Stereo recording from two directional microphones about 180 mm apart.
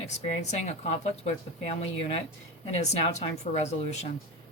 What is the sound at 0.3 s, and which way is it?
Speech, 40° left (ahead or behind).